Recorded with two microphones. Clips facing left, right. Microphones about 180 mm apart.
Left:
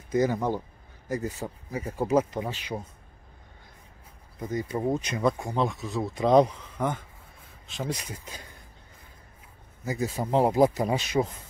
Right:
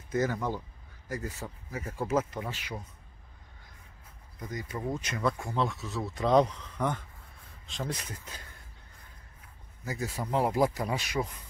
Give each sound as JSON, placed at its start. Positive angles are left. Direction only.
{"t": 0.1, "sound": "speech", "side_deg": 15}
{"t": 4.4, "sound": "speech", "side_deg": 30}
{"t": 9.8, "sound": "speech", "side_deg": 20}